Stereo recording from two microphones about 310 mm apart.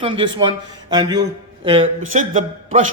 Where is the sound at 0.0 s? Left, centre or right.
Centre.